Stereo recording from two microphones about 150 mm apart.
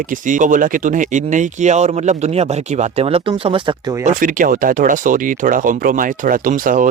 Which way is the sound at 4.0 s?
65° right (ahead or behind).